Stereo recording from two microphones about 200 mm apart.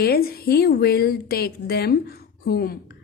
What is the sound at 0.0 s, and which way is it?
A woman's voice, 50° left (ahead or behind).